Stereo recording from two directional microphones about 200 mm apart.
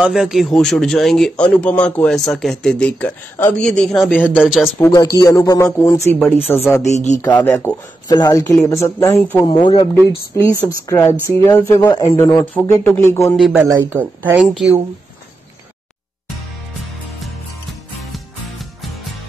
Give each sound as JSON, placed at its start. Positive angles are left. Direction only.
{"t": 0.0, "sound": "a man's voice", "side_deg": 0}
{"t": 4.7, "sound": "speech", "side_deg": 15}
{"t": 6.8, "sound": "speech", "side_deg": 35}
{"t": 7.2, "sound": "speech", "side_deg": 10}
{"t": 9.5, "sound": "speech", "side_deg": 25}
{"t": 9.9, "sound": "speech", "side_deg": 15}
{"t": 13.6, "sound": "speech", "side_deg": -10}